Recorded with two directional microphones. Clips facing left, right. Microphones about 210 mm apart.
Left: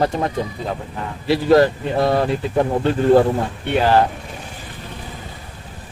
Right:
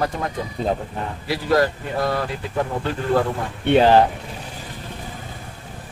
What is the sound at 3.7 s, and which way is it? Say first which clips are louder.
Speech: right 2 dB; 20° right (ahead or behind).